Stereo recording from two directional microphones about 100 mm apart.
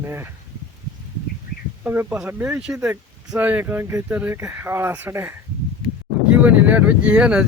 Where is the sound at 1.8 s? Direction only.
20° right (ahead or behind).